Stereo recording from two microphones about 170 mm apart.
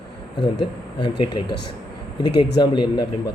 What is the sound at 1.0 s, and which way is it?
Speech, 30° left (ahead or behind).